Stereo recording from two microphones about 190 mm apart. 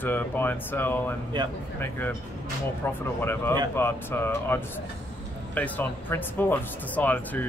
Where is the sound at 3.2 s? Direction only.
10° left (ahead or behind).